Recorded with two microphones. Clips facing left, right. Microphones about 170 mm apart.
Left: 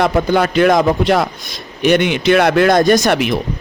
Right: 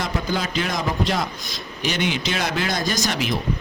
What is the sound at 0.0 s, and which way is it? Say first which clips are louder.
A man's voice: left 11 dB; 65° left (ahead or behind).